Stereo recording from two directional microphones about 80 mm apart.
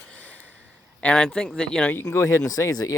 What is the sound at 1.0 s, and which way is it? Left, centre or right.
Speech, centre.